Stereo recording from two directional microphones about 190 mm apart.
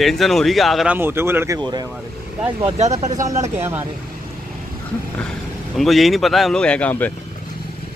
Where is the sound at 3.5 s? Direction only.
10° right (ahead or behind).